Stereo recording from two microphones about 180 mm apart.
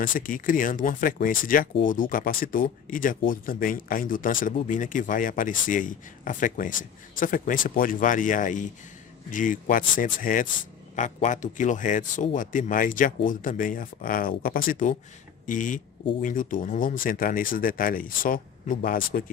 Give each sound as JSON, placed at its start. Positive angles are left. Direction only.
{"t": 0.0, "sound": "a man's voice", "side_deg": 50}